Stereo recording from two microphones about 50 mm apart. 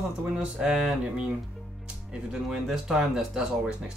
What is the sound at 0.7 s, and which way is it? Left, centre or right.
Speech, centre.